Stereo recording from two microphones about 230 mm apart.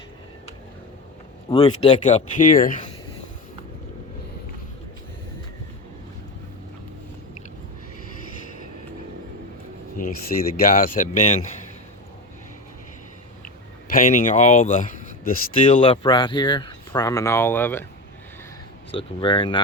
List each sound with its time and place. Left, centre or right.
1.5 s speech: left
10.2 s speech: left
13.9 s speech: left
15.6 s speech: left; by 17.8 s centre
18.9 s speech: left